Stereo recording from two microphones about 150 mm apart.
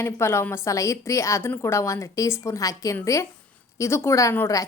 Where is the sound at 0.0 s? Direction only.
15° left (ahead or behind).